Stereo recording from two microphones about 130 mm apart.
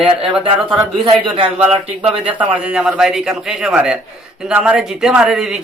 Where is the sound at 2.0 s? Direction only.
10° right (ahead or behind).